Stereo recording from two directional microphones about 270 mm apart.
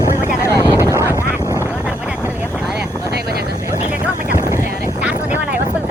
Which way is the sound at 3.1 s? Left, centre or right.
Right.